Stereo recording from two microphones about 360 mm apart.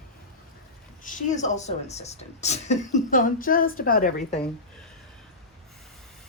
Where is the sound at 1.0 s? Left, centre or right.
Left.